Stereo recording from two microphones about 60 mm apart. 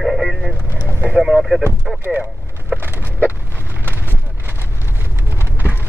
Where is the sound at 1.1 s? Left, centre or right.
Centre.